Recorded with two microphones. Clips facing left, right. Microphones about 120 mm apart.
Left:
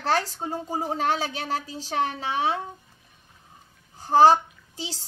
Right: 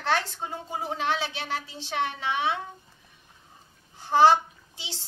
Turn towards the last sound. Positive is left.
turn(degrees=40)  # may be behind; listen again after turning